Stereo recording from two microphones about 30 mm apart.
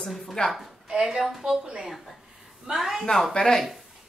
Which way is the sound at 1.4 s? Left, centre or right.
Centre.